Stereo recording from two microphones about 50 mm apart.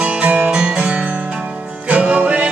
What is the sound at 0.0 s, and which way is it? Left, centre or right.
Music, right.